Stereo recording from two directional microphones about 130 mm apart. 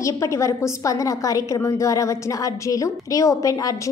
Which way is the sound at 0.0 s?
25° left (ahead or behind).